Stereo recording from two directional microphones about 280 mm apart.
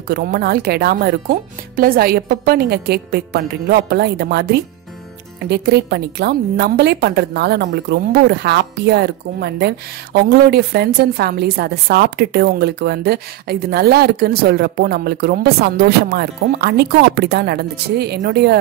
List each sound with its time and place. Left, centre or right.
0.1 s a woman's voice: right